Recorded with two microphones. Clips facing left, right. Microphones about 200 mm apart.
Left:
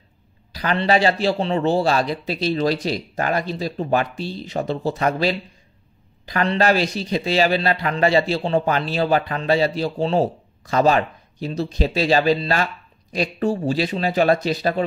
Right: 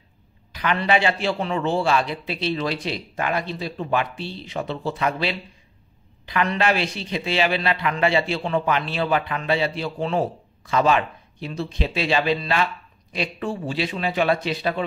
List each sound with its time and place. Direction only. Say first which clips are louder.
0.5 s a man's voice: left 2 dB; 35° left (ahead or behind)